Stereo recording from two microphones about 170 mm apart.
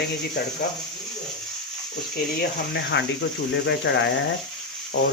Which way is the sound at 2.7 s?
90° left.